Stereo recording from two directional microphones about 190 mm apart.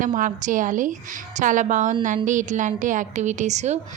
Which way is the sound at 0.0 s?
45° right (ahead or behind).